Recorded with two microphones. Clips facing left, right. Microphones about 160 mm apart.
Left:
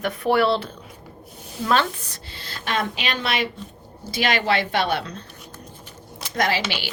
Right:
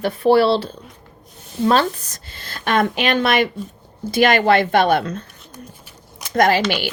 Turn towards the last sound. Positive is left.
turn(degrees=-50)  # may be behind; listen again after turning